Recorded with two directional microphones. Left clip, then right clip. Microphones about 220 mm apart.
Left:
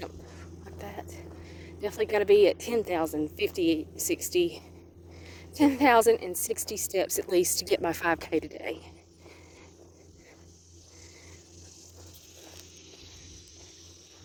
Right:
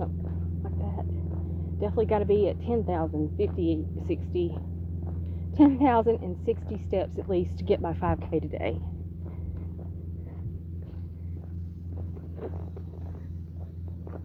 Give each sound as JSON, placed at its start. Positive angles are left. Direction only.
{"t": 0.8, "sound": "vehicle", "side_deg": 45}
{"t": 1.8, "sound": "a woman's voice", "side_deg": 50}